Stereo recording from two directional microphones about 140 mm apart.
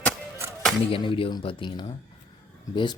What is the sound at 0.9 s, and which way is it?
Speech, 40° left (ahead or behind).